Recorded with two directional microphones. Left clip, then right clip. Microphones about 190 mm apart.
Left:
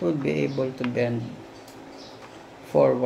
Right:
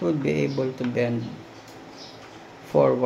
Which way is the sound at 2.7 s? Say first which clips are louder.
Even; 5° right (ahead or behind).